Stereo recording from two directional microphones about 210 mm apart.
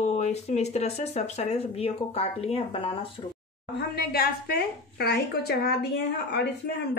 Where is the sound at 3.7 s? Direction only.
50° left (ahead or behind).